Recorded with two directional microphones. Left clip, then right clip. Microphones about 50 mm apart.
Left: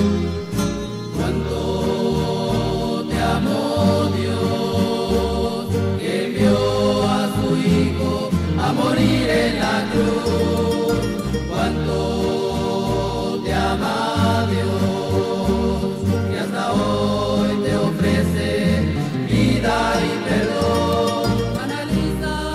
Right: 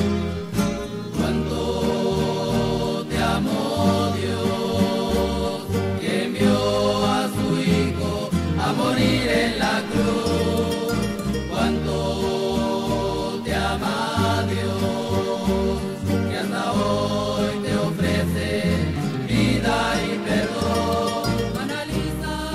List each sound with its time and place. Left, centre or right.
6.4 s chant: left
8.6 s music: left
9.3 s music: centre
20.7 s music: left